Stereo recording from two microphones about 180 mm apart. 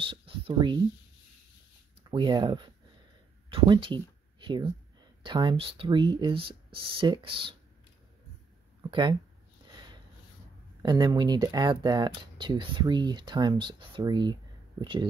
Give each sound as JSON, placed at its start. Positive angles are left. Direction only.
{"t": 0.0, "sound": "speech", "side_deg": -30}
{"t": 2.0, "sound": "speech", "side_deg": -25}
{"t": 3.4, "sound": "a sound", "side_deg": -30}
{"t": 5.2, "sound": "speech", "side_deg": -25}
{"t": 10.8, "sound": "speech", "side_deg": -25}